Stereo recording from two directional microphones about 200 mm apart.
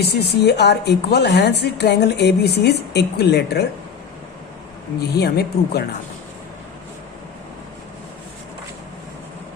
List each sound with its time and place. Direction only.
0.0 s a woman's voice: 55° left (ahead or behind)
4.9 s speech: 55° left (ahead or behind)